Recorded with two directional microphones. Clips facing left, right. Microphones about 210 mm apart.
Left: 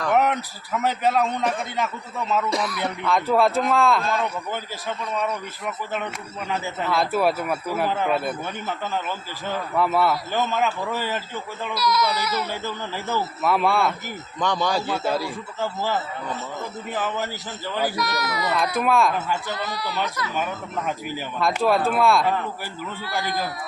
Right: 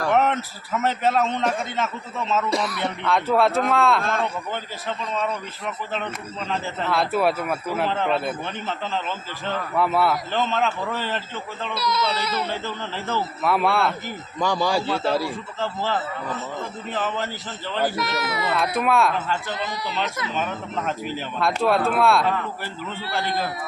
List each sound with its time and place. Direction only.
0.1 s a man's voice: centre (ahead or behind)
5.2 s speech: 10° left (ahead or behind)
6.9 s a man's voice: centre (ahead or behind)
11.7 s speech: 25° right (ahead or behind)
13.4 s a man's voice: centre (ahead or behind)
15.6 s speech: 10° left (ahead or behind)
17.9 s speech: 25° right (ahead or behind)
18.8 s a man's voice: centre (ahead or behind)
19.5 s speech: 20° right (ahead or behind)
20.3 s a man's voice: 10° left (ahead or behind)